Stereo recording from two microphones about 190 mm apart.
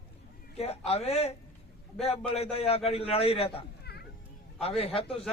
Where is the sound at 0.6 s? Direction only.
35° left (ahead or behind).